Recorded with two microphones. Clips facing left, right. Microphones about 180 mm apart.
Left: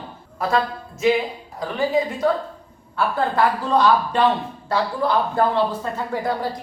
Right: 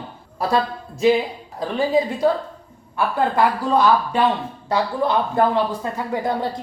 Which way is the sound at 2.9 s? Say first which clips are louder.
Right 1 dB; 10° right (ahead or behind).